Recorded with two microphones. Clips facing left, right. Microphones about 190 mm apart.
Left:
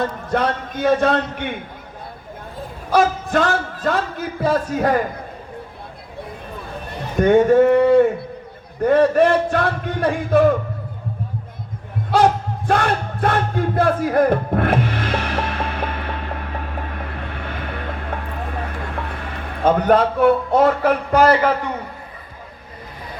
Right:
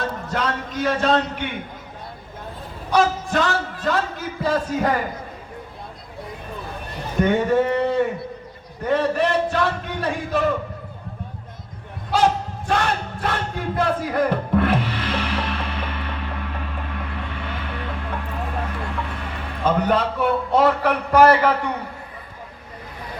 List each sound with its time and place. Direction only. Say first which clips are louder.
0.0 s a man's voice: left 5 dB; 60° left (ahead or behind)
2.9 s a man's voice: left 2 dB; 55° left (ahead or behind)
7.2 s a sound: left 6 dB; 50° left (ahead or behind)
8.8 s a man's voice: left 6 dB; 55° left (ahead or behind)
12.1 s battle cry: left 3 dB; 55° left (ahead or behind)